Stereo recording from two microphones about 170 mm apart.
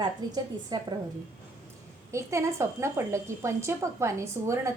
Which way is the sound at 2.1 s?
15° right (ahead or behind).